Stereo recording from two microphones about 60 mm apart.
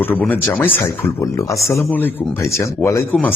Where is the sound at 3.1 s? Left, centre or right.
Left.